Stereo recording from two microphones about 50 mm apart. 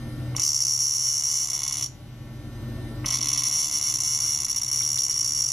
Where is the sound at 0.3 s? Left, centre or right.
Centre.